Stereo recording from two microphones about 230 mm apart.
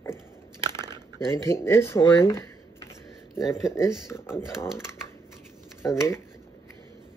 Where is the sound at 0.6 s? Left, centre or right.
Centre.